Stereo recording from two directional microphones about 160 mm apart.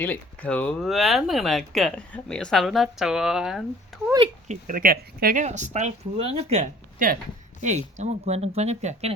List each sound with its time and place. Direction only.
0.0 s speech: 10° left (ahead or behind)
4.4 s speech: 55° right (ahead or behind)
7.0 s speech: 55° right (ahead or behind)